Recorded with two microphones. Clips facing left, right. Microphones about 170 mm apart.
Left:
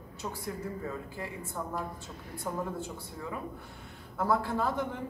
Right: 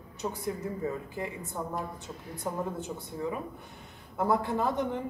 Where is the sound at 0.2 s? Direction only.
25° right (ahead or behind).